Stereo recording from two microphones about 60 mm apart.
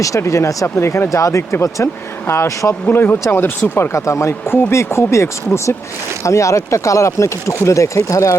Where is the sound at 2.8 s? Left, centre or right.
Left.